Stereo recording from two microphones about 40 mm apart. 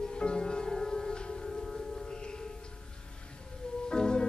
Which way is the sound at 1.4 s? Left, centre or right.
Centre.